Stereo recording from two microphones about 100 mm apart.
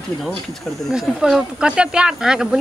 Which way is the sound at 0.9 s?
5° right (ahead or behind).